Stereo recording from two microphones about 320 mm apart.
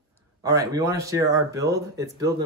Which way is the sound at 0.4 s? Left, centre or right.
Centre.